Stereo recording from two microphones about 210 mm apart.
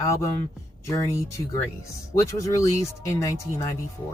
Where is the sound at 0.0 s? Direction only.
15° left (ahead or behind).